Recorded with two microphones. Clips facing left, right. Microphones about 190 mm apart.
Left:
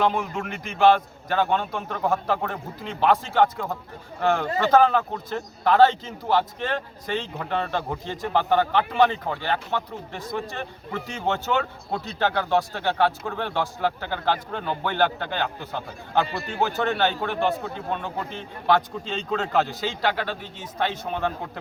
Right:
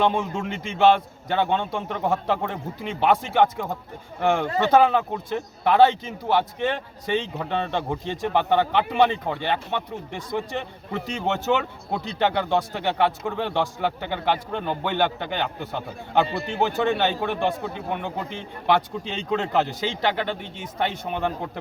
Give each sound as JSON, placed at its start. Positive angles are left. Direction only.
{"t": 0.0, "sound": "a man's voice", "side_deg": -25}
{"t": 11.9, "sound": "a man's voice", "side_deg": -20}